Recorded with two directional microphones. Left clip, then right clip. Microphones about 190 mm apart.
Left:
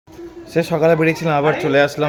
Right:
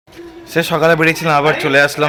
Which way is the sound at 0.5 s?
5° right (ahead or behind).